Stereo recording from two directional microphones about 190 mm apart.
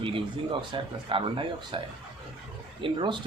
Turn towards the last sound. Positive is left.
turn(degrees=-25)  # may be behind; listen again after turning